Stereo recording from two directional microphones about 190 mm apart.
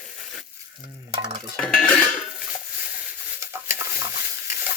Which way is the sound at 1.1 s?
25° right (ahead or behind).